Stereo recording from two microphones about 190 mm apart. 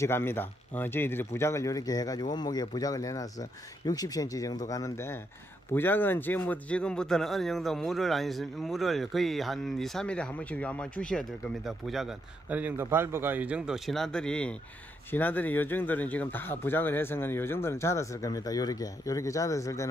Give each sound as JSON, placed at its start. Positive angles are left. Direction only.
{"t": 0.0, "sound": "a man's voice", "side_deg": 10}